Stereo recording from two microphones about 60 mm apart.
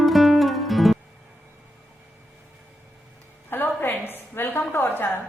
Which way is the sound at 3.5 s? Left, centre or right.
Left.